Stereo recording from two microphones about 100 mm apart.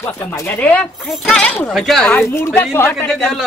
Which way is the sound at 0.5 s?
15° left (ahead or behind).